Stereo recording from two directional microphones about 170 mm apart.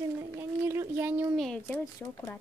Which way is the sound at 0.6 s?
15° right (ahead or behind).